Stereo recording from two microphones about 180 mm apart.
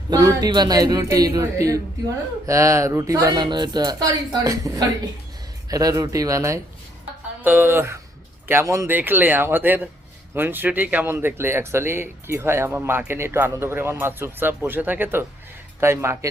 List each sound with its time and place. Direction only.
0.1 s speech: 20° right (ahead or behind)